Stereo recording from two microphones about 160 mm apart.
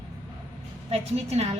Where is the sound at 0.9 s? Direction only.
40° right (ahead or behind).